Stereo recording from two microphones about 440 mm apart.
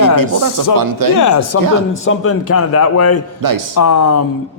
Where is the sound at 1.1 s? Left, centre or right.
Left.